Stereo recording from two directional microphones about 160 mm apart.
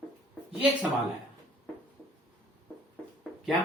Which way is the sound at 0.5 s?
10° right (ahead or behind).